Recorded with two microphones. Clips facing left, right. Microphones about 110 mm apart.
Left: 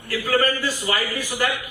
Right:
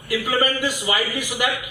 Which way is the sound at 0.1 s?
15° right (ahead or behind).